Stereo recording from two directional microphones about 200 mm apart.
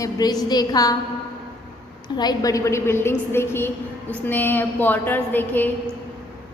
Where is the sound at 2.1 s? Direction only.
20° left (ahead or behind).